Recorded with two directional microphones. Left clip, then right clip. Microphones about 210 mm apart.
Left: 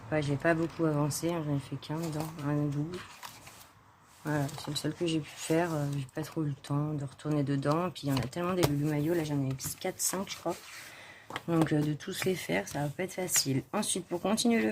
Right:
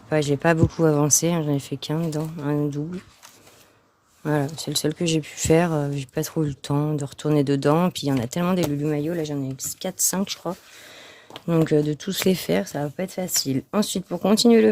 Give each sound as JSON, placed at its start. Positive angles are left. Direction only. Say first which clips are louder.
{"t": 0.1, "sound": "speech", "louder": "right 9 dB", "side_deg": -55}
{"t": 4.2, "sound": "speech", "louder": "right 9 dB", "side_deg": -55}